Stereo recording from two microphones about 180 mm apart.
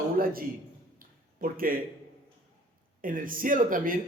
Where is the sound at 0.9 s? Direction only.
50° right (ahead or behind).